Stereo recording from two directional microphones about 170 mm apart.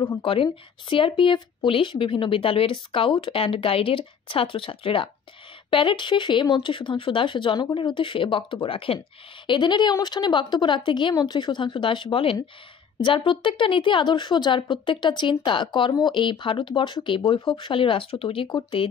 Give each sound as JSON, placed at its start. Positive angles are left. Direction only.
{"t": 0.2, "sound": "a woman's voice", "side_deg": 30}